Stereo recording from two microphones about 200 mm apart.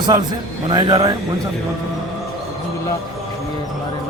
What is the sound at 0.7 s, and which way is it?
Speech, 25° right (ahead or behind).